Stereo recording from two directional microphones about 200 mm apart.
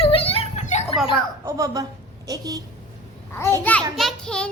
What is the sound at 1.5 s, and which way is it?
A woman's voice, 15° right (ahead or behind).